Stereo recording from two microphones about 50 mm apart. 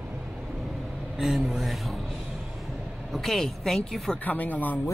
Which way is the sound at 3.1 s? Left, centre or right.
Centre.